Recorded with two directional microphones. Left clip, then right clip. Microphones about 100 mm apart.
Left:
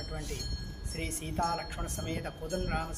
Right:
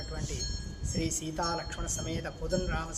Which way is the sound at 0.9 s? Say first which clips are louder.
Right 1 dB; 40° right (ahead or behind).